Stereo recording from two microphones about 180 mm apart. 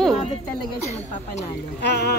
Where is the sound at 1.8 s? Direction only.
65° left (ahead or behind).